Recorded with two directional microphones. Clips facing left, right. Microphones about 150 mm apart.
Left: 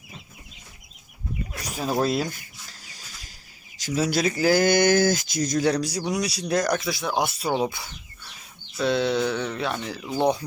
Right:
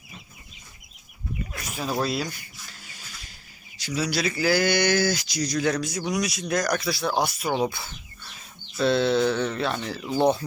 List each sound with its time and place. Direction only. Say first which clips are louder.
2.0 s speech: left 4 dB; 45° left (ahead or behind)
2.8 s a sound: right 1 dB; 40° left (ahead or behind)
3.8 s speech: left 3 dB; 45° left (ahead or behind)
5.6 s speech: left 2 dB; 35° left (ahead or behind)
7.7 s bird: right 1 dB; 15° left (ahead or behind)
8.8 s a sound: right 2 dB; 15° left (ahead or behind)